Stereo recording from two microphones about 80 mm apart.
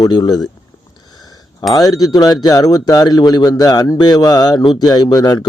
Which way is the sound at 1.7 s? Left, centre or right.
Left.